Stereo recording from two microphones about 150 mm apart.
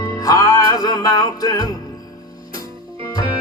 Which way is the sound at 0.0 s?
25° left (ahead or behind).